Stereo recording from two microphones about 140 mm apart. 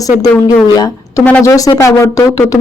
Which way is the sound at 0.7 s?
25° left (ahead or behind).